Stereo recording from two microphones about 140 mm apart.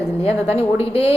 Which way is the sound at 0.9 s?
45° left (ahead or behind).